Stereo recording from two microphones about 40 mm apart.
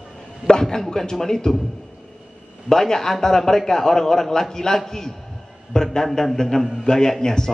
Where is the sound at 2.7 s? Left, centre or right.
Centre.